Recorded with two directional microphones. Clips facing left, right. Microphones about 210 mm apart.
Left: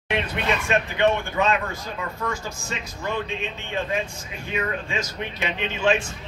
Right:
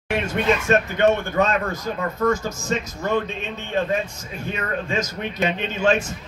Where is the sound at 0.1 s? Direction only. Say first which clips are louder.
Right 4 dB; 45° right (ahead or behind).